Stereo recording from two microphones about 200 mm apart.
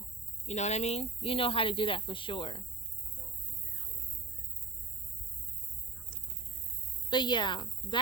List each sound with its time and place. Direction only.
0.4 s speech: 35° left (ahead or behind)
7.1 s speech: 20° left (ahead or behind)